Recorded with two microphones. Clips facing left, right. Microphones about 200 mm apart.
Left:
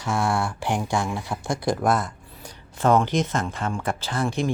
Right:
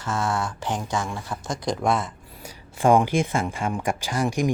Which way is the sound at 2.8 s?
10° right (ahead or behind).